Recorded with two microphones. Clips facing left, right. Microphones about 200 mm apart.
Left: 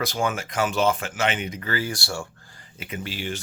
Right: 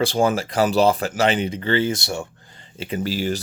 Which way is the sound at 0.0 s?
30° right (ahead or behind).